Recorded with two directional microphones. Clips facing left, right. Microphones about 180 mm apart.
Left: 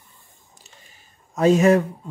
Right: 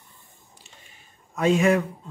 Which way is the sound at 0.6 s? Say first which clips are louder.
Left 2 dB; 40° left (ahead or behind).